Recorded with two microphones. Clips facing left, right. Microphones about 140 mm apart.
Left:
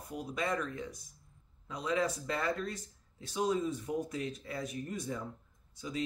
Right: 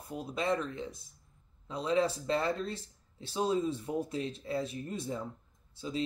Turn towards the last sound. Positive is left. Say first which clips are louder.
# right 2 dB
turn(degrees=-30)  # may be behind; listen again after turning